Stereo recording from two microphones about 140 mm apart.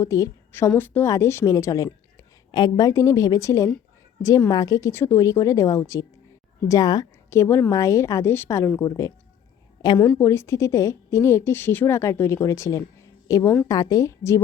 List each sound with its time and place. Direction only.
0.0 s a woman's voice: 20° left (ahead or behind)